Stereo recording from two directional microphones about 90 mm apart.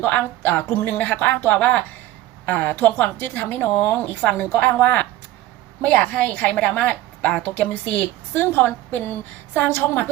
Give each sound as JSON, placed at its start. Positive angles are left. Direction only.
{"t": 0.0, "sound": "a woman's voice", "side_deg": 20}